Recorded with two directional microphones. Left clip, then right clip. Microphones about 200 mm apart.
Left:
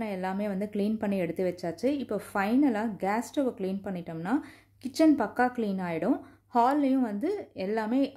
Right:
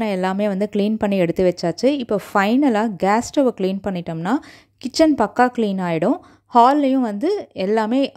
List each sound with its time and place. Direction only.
0.0 s a woman's voice: 45° right (ahead or behind)